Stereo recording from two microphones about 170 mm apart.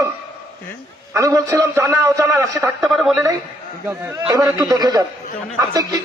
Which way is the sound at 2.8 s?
Centre (ahead or behind).